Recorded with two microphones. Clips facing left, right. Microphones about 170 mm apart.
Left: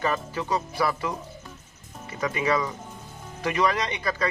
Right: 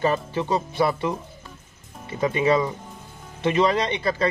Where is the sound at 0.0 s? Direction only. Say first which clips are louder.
Right 4 dB; 25° right (ahead or behind).